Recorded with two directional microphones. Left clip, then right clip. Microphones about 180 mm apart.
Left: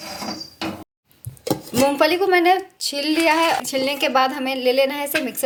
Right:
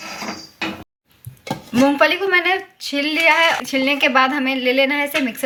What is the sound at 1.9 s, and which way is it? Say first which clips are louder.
A woman's voice: even; 45° left (ahead or behind).